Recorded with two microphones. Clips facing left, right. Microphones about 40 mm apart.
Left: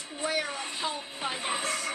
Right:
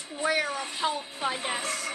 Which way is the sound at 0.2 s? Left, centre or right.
Right.